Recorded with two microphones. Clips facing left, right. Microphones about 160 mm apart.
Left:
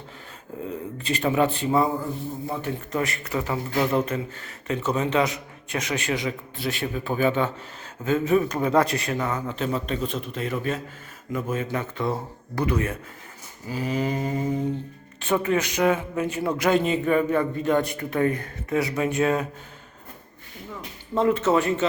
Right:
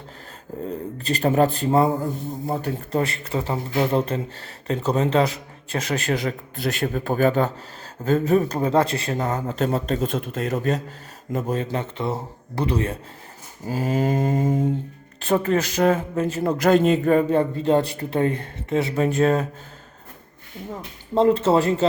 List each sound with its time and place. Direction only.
0.9 s a man's voice: 35° right (ahead or behind)
13.7 s mantra: 45° right (ahead or behind)
15.3 s speech: 35° right (ahead or behind)
21.2 s speech: 30° right (ahead or behind)